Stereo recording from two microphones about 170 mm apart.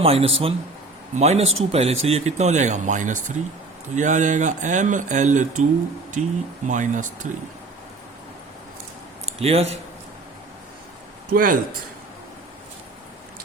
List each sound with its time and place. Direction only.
0.0 s speech: 35° right (ahead or behind)
9.2 s a sound: 35° right (ahead or behind)
11.3 s speech: 55° right (ahead or behind)